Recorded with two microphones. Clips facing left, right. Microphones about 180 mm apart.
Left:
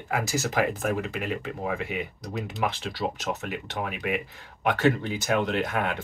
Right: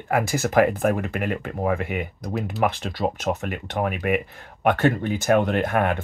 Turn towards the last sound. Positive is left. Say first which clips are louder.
# right 5 dB
turn(degrees=-55)  # may be behind; listen again after turning